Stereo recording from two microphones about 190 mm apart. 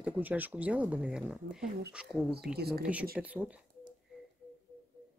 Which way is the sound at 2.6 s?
55° right (ahead or behind).